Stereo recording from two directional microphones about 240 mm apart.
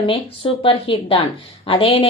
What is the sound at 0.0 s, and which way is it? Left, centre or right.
A woman's voice, left.